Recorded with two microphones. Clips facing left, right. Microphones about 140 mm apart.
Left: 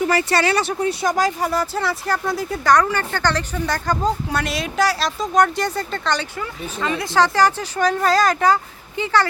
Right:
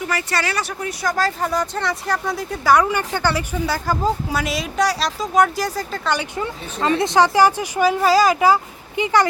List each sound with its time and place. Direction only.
0.1 s speech: 30° left (ahead or behind)
1.1 s speech: 15° left (ahead or behind)
1.5 s speech: 5° left (ahead or behind)
2.7 s speech: 15° right (ahead or behind)
6.7 s speech: 35° right (ahead or behind)
7.0 s speech: 15° right (ahead or behind)